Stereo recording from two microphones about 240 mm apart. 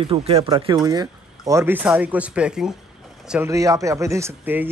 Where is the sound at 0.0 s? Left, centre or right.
Right.